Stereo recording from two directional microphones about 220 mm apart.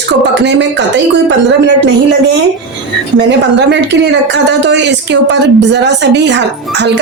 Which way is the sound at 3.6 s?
50° right (ahead or behind).